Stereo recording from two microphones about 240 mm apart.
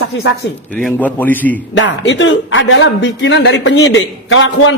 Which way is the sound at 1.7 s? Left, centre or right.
Left.